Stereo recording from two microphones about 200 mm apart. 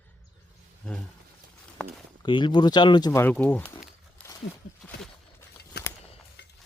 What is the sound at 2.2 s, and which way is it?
Speech, 25° left (ahead or behind).